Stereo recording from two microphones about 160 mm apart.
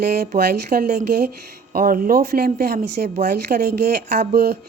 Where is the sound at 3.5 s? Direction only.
60° right (ahead or behind).